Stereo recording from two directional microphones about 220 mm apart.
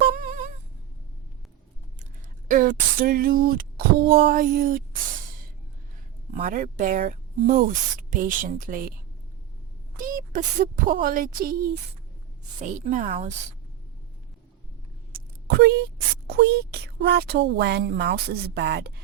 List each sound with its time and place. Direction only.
0.1 s music: 35° right (ahead or behind)
2.5 s speech: 35° right (ahead or behind)
6.3 s speech: 35° right (ahead or behind)
10.0 s speech: 35° right (ahead or behind)
12.6 s speech: 35° right (ahead or behind)
15.4 s speech: 45° right (ahead or behind)